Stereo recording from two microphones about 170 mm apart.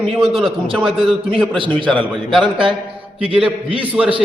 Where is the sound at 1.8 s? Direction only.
30° right (ahead or behind).